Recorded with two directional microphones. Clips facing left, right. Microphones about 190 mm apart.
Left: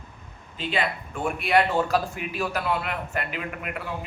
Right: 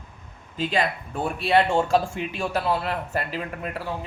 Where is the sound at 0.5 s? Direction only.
40° right (ahead or behind).